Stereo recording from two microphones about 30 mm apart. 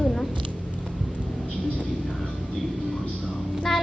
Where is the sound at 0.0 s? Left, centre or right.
Centre.